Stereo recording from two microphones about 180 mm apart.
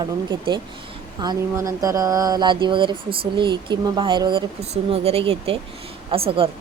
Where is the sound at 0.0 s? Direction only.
25° right (ahead or behind).